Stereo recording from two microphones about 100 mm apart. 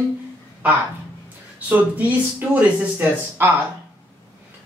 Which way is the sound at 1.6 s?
15° right (ahead or behind).